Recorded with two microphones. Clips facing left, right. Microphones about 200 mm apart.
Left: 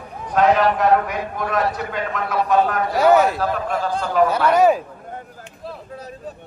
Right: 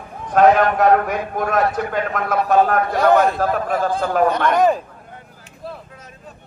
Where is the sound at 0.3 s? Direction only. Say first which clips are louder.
Right 3 dB; 50° right (ahead or behind).